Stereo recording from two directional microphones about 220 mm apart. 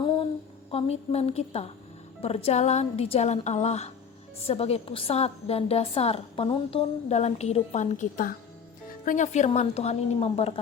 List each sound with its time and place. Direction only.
0.7 s a woman's voice: 25° left (ahead or behind)